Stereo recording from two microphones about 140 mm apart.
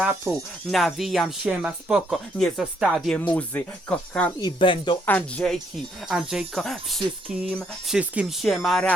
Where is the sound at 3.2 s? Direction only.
10° left (ahead or behind).